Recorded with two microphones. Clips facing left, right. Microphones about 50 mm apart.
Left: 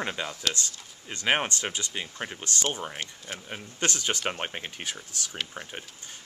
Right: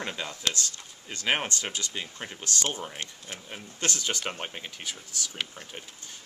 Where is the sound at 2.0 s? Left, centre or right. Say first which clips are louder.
Left 3 dB; centre.